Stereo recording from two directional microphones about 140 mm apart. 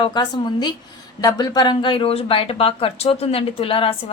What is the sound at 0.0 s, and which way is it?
Speech, 30° left (ahead or behind).